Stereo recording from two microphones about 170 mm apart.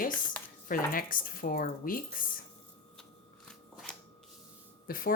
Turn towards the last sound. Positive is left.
turn(degrees=60)  # may be behind; listen again after turning